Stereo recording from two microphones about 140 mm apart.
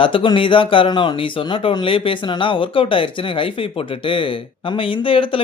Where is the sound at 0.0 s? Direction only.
40° left (ahead or behind).